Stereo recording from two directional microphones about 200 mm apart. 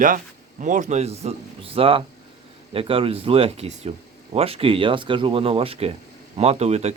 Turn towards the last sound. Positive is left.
turn(degrees=-35)  # may be behind; listen again after turning